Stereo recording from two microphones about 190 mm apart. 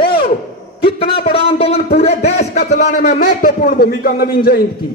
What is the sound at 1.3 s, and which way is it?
Speech, 30° left (ahead or behind).